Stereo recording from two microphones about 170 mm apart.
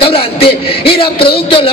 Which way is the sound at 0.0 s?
30° left (ahead or behind).